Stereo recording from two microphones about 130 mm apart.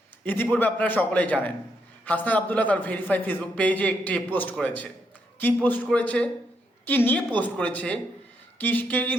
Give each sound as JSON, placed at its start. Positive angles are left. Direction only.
{"t": 0.3, "sound": "a man's voice", "side_deg": 15}